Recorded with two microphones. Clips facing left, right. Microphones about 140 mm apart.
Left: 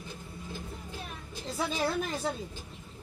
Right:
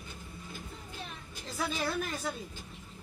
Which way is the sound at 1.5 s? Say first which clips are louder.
Left 3 dB; 25° left (ahead or behind).